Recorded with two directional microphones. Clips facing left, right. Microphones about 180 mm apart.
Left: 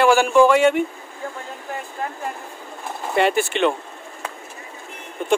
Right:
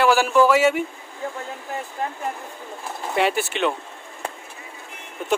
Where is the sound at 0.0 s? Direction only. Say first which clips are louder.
Left 2 dB; 5° right (ahead or behind).